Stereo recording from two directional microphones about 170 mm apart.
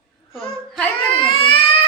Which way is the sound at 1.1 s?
35° left (ahead or behind).